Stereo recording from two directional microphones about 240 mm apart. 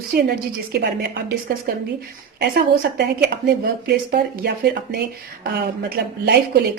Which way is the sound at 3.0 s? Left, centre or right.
Right.